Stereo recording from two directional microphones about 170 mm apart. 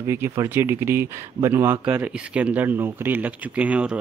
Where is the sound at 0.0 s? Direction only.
15° right (ahead or behind).